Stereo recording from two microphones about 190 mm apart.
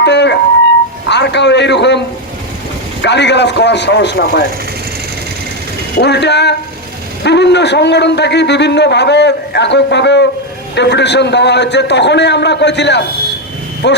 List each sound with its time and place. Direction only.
0.0 s a sound: 65° left (ahead or behind)
1.0 s a man's voice: 65° left (ahead or behind)
3.0 s a man's voice: 65° left (ahead or behind)
6.0 s a man's voice: 60° left (ahead or behind)